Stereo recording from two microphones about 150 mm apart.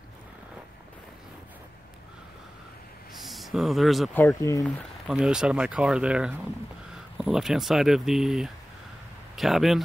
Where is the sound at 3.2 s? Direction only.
Centre (ahead or behind).